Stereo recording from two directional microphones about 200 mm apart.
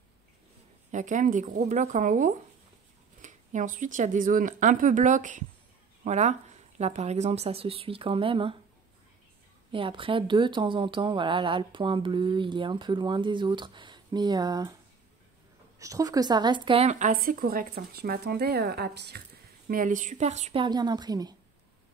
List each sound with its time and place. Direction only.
0.9 s speech: 40° right (ahead or behind)
9.7 s speech: 25° right (ahead or behind)
15.8 s a woman's voice: 15° right (ahead or behind); by 19.2 s 55° right (ahead or behind)
19.7 s speech: 40° right (ahead or behind)
20.6 s speech: 20° right (ahead or behind)